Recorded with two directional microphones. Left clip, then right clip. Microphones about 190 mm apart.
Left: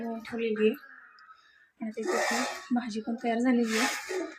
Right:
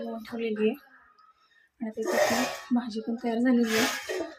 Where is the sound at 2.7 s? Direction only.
5° left (ahead or behind).